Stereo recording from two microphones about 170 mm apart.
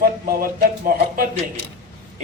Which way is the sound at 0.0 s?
60° right (ahead or behind).